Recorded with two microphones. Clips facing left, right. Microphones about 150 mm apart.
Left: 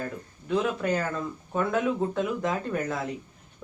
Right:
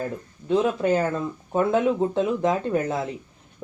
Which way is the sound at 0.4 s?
30° right (ahead or behind).